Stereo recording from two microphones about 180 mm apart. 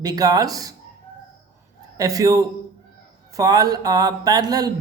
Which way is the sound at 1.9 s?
20° right (ahead or behind).